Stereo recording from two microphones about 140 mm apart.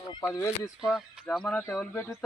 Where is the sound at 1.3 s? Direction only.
5° left (ahead or behind).